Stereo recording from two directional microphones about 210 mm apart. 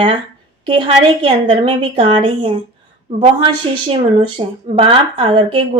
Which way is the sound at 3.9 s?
25° right (ahead or behind).